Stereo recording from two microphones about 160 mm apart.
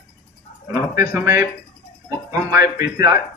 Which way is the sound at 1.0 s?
20° right (ahead or behind).